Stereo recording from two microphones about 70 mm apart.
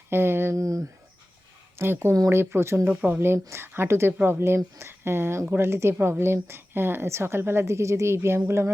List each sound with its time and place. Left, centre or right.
0.1 s speech: right
0.5 s a sound: right
1.8 s a woman's voice: right
2.8 s speech: right
3.2 s a woman's voice: right